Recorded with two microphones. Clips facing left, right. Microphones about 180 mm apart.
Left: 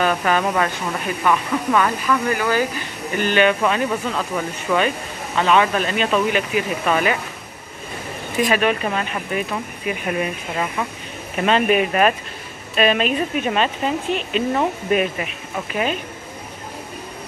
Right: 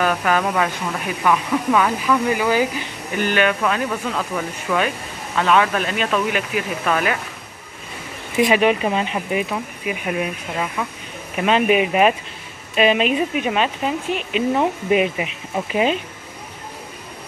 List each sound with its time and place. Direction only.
0.0 s speech: centre (ahead or behind)
3.6 s speech: 5° left (ahead or behind)
8.4 s a woman's voice: 15° right (ahead or behind)